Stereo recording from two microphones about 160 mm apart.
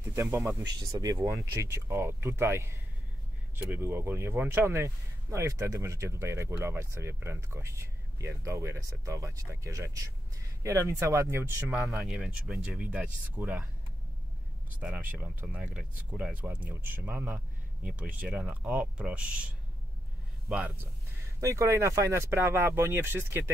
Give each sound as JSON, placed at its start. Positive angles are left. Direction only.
{"t": 0.1, "sound": "speech", "side_deg": -20}
{"t": 12.0, "sound": "speech", "side_deg": -5}
{"t": 14.8, "sound": "speech", "side_deg": -10}
{"t": 21.4, "sound": "speech", "side_deg": -20}